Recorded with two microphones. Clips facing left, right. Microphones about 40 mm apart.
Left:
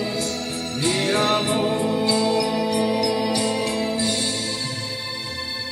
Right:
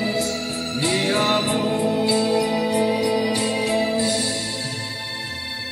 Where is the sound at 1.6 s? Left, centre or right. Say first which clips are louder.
Right 1 dB; left.